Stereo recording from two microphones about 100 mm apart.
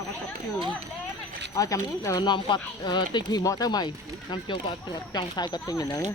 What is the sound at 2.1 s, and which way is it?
Speech, 50° left (ahead or behind).